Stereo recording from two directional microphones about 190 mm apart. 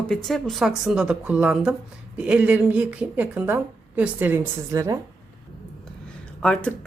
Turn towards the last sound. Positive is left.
turn(degrees=5)  # may be behind; listen again after turning